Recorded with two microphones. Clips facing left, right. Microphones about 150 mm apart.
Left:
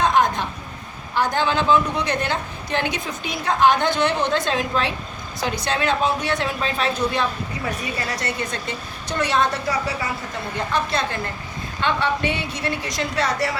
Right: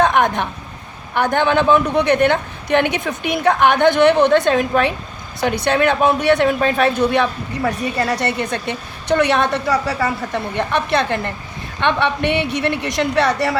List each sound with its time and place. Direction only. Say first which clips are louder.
0.0 s a woman's voice: right 3 dB; 65° right (ahead or behind)